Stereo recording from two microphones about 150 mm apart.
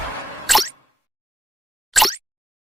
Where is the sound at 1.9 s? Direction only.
Centre (ahead or behind).